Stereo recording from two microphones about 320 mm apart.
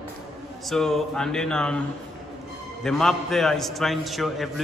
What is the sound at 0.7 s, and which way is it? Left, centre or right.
A man's voice, centre.